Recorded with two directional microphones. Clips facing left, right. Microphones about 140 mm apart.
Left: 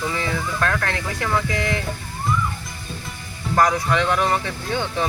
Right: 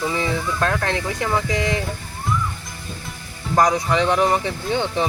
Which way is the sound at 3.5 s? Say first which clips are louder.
Right 1 dB; 20° right (ahead or behind).